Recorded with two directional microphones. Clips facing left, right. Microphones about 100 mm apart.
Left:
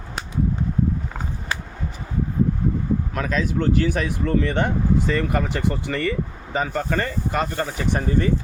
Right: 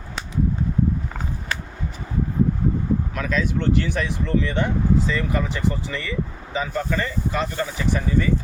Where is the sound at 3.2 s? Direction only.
40° left (ahead or behind).